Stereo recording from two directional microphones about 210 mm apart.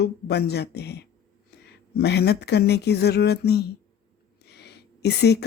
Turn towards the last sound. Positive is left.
turn(degrees=50)  # may be behind; listen again after turning